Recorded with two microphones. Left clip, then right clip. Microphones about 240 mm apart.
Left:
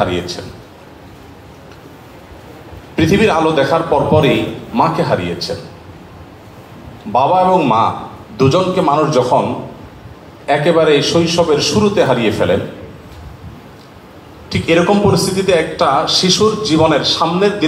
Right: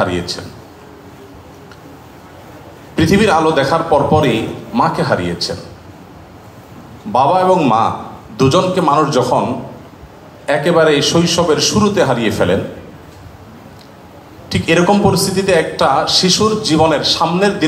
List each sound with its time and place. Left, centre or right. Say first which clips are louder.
0.0 s a man's voice: even; right
3.0 s a man's voice: even; right
7.1 s a man's voice: even; right
10.4 s a man's voice: even; right
14.5 s a man's voice: even; right